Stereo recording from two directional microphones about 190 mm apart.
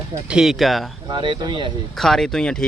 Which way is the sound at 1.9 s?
Centre (ahead or behind).